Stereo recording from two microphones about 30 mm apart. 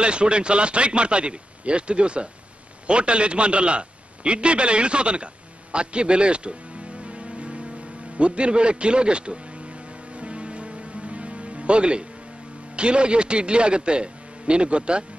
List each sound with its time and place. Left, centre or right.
0.0 s a man's voice: right
7.0 s music: right
8.2 s a man's voice: right
10.1 s music: right
12.7 s a man's voice: right